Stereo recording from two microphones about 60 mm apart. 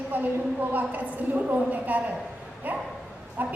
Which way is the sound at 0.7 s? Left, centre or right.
Right.